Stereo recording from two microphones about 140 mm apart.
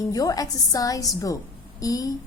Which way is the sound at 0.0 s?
25° left (ahead or behind).